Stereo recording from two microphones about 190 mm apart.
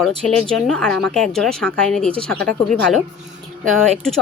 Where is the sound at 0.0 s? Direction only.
5° left (ahead or behind).